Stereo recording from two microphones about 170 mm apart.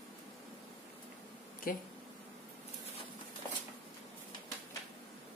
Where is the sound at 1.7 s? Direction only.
55° left (ahead or behind).